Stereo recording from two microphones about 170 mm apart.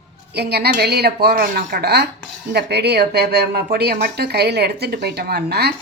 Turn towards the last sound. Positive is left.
turn(degrees=-70)  # may be behind; listen again after turning